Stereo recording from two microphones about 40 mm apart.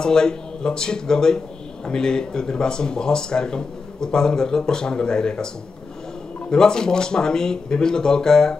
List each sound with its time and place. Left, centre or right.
0.0 s speech: centre
6.5 s speech: centre